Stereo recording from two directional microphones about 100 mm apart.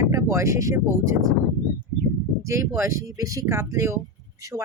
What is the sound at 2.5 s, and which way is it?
Speech, 25° right (ahead or behind).